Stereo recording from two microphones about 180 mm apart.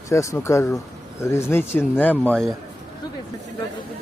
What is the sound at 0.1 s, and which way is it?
Speech, 15° left (ahead or behind).